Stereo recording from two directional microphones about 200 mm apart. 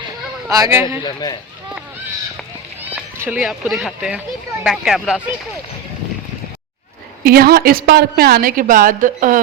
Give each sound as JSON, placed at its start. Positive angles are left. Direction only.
{"t": 0.5, "sound": "a man's voice", "side_deg": -15}
{"t": 1.0, "sound": "speech", "side_deg": 20}
{"t": 2.9, "sound": "speech", "side_deg": -10}
{"t": 7.3, "sound": "a woman's voice", "side_deg": -50}